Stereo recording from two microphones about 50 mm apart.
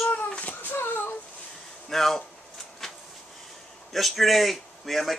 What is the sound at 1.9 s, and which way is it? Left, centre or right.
Speech, centre.